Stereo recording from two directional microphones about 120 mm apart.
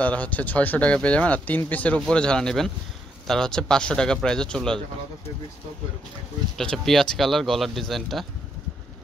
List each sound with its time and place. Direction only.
0.0 s speech: 10° left (ahead or behind)
6.6 s speech: 5° left (ahead or behind)